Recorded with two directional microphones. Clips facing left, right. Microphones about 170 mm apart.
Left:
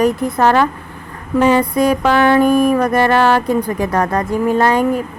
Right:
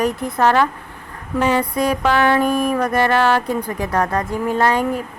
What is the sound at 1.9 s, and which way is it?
A woman's voice, 45° left (ahead or behind).